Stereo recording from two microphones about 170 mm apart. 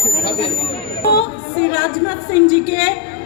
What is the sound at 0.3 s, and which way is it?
Chatter, 35° left (ahead or behind).